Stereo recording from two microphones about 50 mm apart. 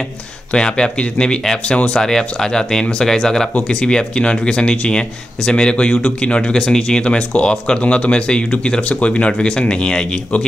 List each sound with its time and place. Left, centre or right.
0.5 s speech: centre
3.5 s speech: left